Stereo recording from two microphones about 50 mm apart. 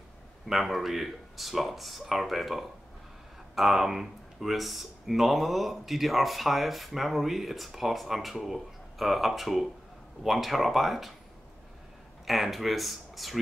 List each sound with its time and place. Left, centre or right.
0.5 s speech: centre
12.3 s speech: centre